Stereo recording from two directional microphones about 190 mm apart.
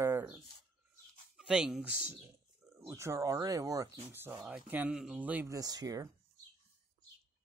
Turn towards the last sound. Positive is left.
turn(degrees=-20)  # may be behind; listen again after turning